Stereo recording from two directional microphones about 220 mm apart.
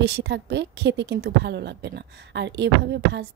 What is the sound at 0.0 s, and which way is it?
Speech, 50° right (ahead or behind).